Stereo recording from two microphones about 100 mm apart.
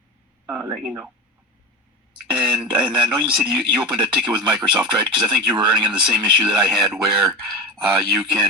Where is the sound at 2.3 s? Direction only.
5° right (ahead or behind).